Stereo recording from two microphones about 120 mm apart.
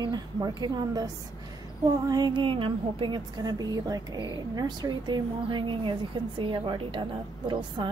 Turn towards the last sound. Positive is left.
turn(degrees=-40)  # may be behind; listen again after turning